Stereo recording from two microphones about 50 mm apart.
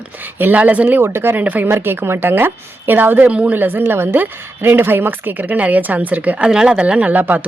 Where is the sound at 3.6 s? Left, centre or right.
Right.